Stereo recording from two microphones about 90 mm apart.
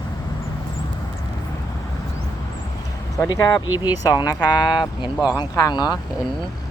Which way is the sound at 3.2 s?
35° left (ahead or behind).